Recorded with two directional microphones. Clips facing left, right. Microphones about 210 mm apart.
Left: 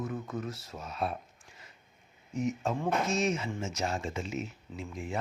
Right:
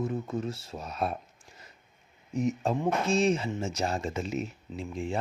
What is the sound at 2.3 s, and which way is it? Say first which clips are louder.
Speech: right 3 dB; 35° right (ahead or behind).